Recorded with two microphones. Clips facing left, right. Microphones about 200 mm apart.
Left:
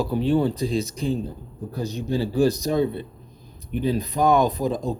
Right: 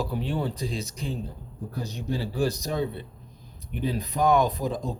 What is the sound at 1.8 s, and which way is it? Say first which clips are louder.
Speech: left 6 dB; 25° left (ahead or behind).